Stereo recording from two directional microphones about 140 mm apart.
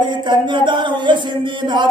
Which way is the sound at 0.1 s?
35° right (ahead or behind).